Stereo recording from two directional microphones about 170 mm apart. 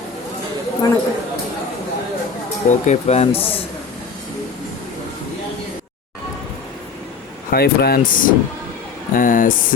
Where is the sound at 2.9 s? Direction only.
40° left (ahead or behind).